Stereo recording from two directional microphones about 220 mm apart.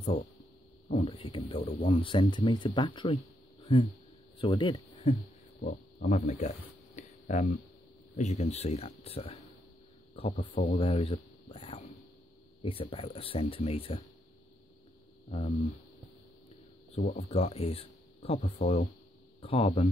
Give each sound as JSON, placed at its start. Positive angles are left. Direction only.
{"t": 0.8, "sound": "speech", "side_deg": 25}
{"t": 4.4, "sound": "speech", "side_deg": 20}
{"t": 5.6, "sound": "speech", "side_deg": 40}
{"t": 7.0, "sound": "a sound", "side_deg": 35}
{"t": 8.2, "sound": "speech", "side_deg": 30}
{"t": 10.8, "sound": "a sound", "side_deg": 25}
{"t": 12.6, "sound": "speech", "side_deg": 25}
{"t": 15.2, "sound": "speech", "side_deg": 30}
{"t": 16.9, "sound": "speech", "side_deg": 30}